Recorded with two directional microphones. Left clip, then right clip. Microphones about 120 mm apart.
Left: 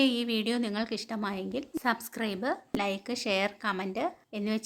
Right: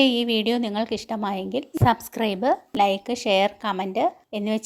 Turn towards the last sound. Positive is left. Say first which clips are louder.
# right 7 dB
turn(degrees=-35)  # may be behind; listen again after turning